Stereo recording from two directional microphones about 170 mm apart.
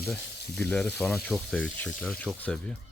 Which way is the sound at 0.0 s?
Centre (ahead or behind).